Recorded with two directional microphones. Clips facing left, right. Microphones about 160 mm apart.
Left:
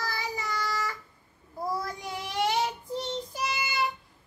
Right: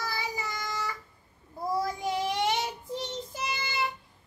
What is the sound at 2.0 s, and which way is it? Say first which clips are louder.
Child singing: right 2 dB; 20° right (ahead or behind).